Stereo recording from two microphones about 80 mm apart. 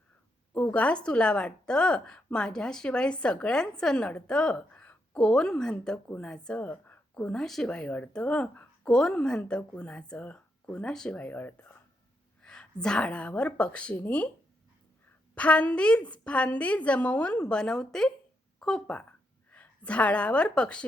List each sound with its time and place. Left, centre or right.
0.5 s speech: centre
12.4 s speech: centre
15.4 s a woman's voice: centre